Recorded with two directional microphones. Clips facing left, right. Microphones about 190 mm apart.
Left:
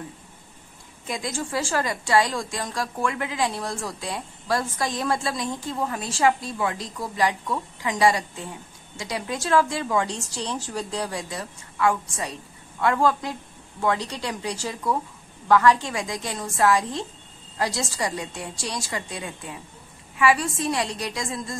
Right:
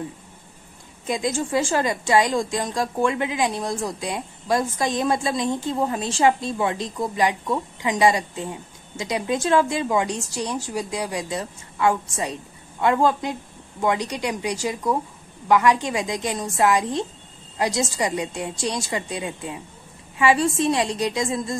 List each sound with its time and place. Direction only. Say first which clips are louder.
1.0 s a woman's voice: right 6 dB; 20° right (ahead or behind)